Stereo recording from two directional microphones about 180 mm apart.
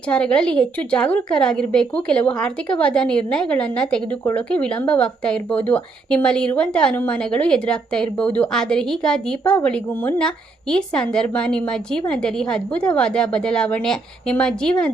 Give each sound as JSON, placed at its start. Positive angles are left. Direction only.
{"t": 0.1, "sound": "speech", "side_deg": 5}